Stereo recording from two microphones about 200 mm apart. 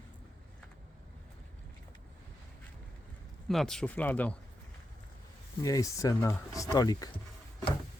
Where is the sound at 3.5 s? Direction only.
Centre (ahead or behind).